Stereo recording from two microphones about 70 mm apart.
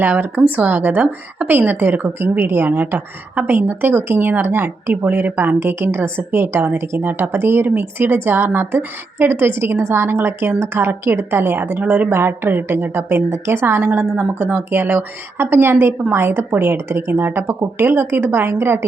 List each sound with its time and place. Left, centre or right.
0.0 s a woman's voice: right
12.1 s a woman's voice: right